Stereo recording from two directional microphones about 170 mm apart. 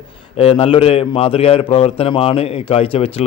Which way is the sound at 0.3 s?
35° left (ahead or behind).